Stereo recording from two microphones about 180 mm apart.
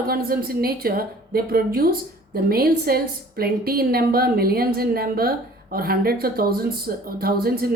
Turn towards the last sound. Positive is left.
turn(degrees=-55)  # may be behind; listen again after turning